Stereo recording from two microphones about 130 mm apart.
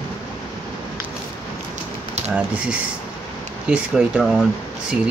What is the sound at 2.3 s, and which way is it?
Speech, 10° right (ahead or behind).